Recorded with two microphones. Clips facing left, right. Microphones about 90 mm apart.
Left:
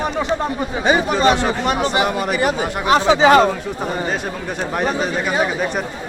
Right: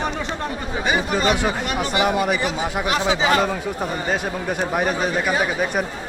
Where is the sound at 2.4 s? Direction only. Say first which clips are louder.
Left 4 dB; 45° left (ahead or behind).